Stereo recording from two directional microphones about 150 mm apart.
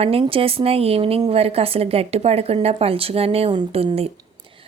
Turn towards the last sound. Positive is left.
turn(degrees=-40)  # may be behind; listen again after turning